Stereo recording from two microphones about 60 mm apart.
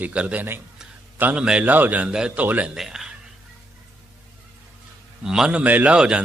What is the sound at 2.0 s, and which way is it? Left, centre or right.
Speech, centre.